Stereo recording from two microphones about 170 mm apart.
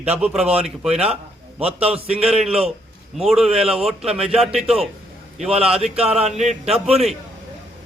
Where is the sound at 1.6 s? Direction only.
35° right (ahead or behind).